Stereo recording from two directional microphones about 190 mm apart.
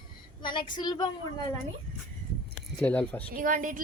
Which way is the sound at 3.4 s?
45° right (ahead or behind).